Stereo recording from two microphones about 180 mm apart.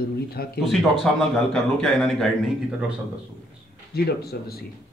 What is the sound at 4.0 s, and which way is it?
Speech, 60° left (ahead or behind).